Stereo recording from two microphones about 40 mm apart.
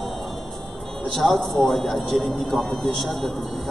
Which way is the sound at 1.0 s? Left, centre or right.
Centre.